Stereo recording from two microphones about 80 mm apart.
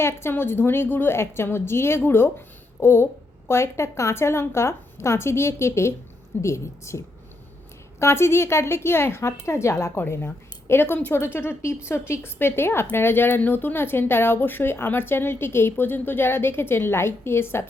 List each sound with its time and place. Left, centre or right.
0.0 s speech: left